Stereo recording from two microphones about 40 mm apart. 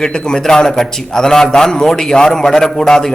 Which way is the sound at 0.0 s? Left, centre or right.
Centre.